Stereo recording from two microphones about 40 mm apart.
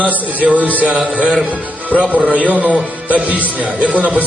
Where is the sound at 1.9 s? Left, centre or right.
Left.